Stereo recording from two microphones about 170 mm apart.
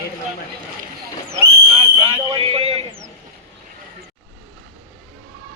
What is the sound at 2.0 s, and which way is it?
Speech, 35° right (ahead or behind).